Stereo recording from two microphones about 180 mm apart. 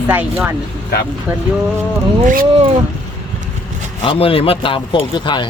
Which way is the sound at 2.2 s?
50° right (ahead or behind).